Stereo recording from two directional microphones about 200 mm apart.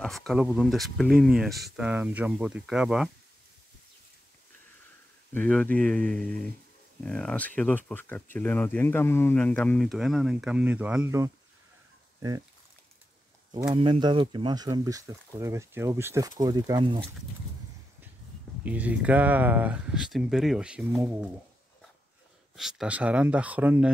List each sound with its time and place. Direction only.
0.0 s speech: centre (ahead or behind)
5.3 s speech: 5° left (ahead or behind); by 11.3 s 15° right (ahead or behind)
13.5 s speech: 15° right (ahead or behind)
18.6 s speech: 5° right (ahead or behind)
22.6 s speech: centre (ahead or behind)